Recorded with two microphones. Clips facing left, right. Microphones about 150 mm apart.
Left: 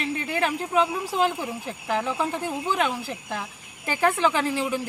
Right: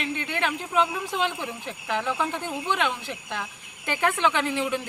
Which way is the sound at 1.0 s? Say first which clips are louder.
Left 4 dB; 35° left (ahead or behind).